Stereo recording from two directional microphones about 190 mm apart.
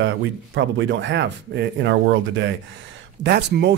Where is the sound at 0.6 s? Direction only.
75° right (ahead or behind).